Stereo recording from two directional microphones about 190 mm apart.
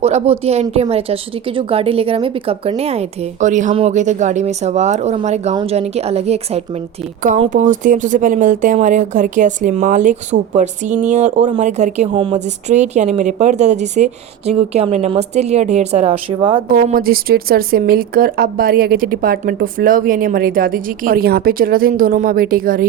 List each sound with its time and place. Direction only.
0.0 s speech: 35° right (ahead or behind)
16.6 s speech: 50° right (ahead or behind)